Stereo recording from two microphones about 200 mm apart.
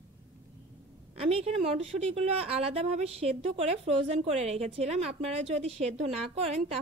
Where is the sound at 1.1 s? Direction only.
30° right (ahead or behind).